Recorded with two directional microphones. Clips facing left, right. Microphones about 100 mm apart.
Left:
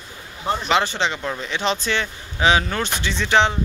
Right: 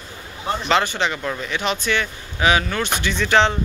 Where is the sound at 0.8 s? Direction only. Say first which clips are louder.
Even; 30° left (ahead or behind).